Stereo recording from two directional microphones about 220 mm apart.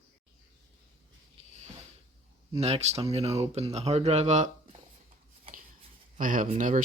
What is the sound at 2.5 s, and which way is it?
Speech, 30° right (ahead or behind).